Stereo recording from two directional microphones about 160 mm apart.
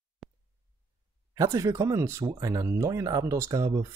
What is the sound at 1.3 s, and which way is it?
Speech, 20° right (ahead or behind).